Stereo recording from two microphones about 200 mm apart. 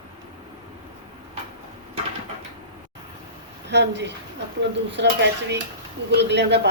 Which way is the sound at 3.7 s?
60° right (ahead or behind).